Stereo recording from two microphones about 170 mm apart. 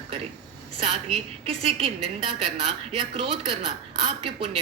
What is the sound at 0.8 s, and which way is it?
Speech, 35° right (ahead or behind).